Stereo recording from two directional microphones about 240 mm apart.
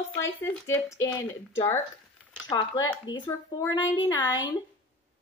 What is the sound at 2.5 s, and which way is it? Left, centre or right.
A woman's voice, centre.